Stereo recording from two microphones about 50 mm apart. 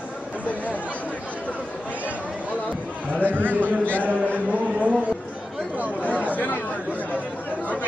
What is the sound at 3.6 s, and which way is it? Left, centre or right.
Speech, left.